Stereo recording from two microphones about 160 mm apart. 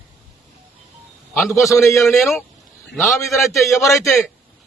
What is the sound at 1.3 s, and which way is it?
Speech, 15° left (ahead or behind).